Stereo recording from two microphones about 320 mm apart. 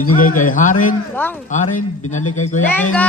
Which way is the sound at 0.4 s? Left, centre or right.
Left.